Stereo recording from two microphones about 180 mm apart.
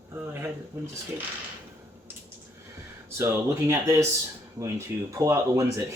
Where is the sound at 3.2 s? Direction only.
15° right (ahead or behind).